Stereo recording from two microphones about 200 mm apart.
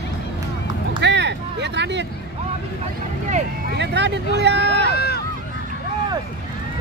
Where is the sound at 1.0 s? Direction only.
60° right (ahead or behind).